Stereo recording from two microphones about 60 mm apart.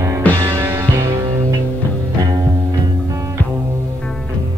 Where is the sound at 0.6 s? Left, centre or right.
Right.